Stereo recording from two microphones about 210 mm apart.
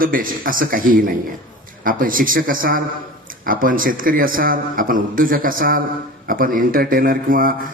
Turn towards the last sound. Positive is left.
turn(degrees=-40)  # may be behind; listen again after turning